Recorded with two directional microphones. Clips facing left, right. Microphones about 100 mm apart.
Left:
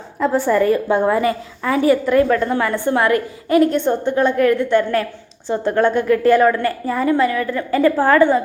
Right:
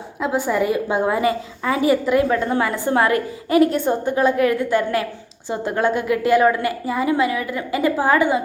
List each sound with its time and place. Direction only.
0.2 s a woman's voice: 5° right (ahead or behind); by 3.6 s 25° right (ahead or behind)
3.8 s a woman's voice: 10° right (ahead or behind)